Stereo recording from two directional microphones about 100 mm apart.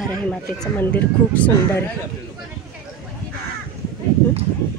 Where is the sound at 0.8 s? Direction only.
15° left (ahead or behind).